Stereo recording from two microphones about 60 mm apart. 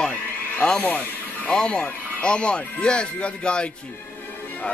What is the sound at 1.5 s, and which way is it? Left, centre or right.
Speech, centre.